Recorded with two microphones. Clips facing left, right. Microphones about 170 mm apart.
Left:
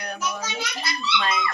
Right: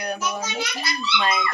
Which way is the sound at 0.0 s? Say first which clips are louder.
Right 3 dB; 15° right (ahead or behind).